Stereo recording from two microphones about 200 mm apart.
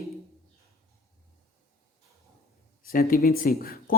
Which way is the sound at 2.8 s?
45° left (ahead or behind).